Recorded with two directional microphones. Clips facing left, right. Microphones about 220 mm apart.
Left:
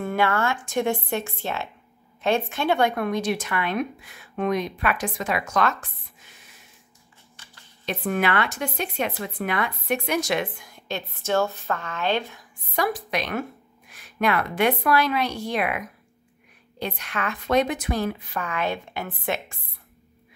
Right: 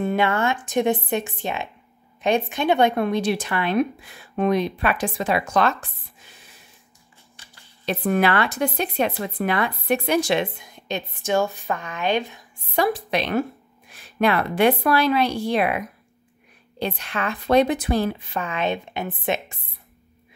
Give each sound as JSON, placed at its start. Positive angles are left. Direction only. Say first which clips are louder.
{"t": 0.0, "sound": "a woman's voice", "louder": "right 2 dB", "side_deg": -20}
{"t": 7.8, "sound": "a woman's voice", "louder": "right 4 dB", "side_deg": -35}